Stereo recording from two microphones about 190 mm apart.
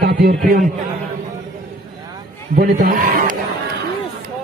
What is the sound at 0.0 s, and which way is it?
Speech, 55° right (ahead or behind).